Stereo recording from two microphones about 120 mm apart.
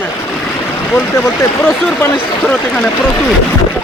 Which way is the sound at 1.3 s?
20° left (ahead or behind).